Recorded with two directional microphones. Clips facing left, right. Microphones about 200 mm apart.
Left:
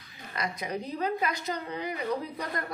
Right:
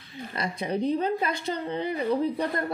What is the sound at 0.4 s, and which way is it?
A woman's voice, 30° right (ahead or behind).